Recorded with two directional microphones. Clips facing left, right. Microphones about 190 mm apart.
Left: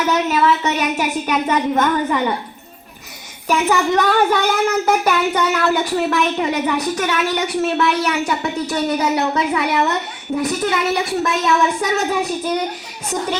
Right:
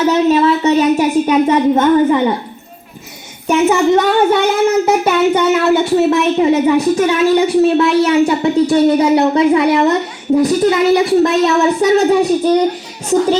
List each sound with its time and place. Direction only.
0.0 s a woman's voice: 30° right (ahead or behind)
3.4 s a woman's voice: 25° right (ahead or behind)